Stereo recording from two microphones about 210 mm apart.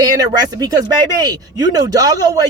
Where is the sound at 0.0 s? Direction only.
20° right (ahead or behind).